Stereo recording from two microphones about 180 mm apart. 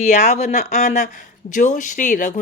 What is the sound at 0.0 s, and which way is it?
Speech, 40° left (ahead or behind).